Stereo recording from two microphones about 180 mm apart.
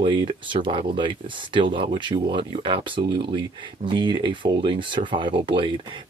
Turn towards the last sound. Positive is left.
turn(degrees=-30)  # may be behind; listen again after turning